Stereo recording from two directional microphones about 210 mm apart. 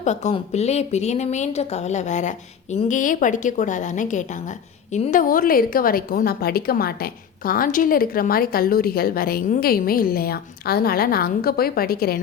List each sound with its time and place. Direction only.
0.0 s speech: 35° left (ahead or behind)